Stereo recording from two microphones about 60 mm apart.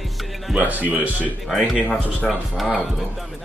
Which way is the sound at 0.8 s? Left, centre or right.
Right.